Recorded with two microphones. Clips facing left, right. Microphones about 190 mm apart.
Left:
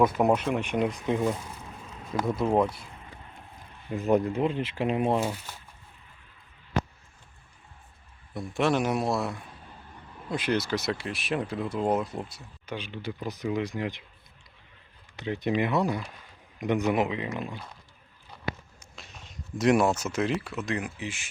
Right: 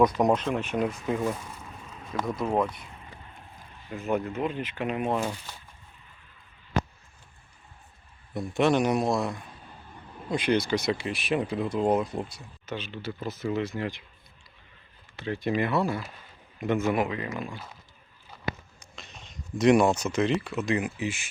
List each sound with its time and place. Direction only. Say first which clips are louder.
0.1 s speech: even; 5° left (ahead or behind)
2.1 s speech: left 2 dB; 5° left (ahead or behind)
3.8 s speech: left 5 dB; 35° left (ahead or behind)
8.3 s speech: right 2 dB; centre (ahead or behind)
12.7 s speech: even; 15° left (ahead or behind)
15.1 s speech: even; 20° left (ahead or behind)
15.9 s speech: even; centre (ahead or behind)
16.6 s speech: even; 15° left (ahead or behind)
18.9 s a sound: right 1 dB; 10° left (ahead or behind)
19.5 s speech: right 2 dB; 5° left (ahead or behind)